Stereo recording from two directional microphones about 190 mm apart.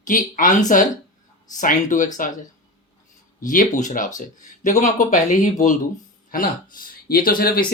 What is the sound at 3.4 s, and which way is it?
Speech, 45° left (ahead or behind).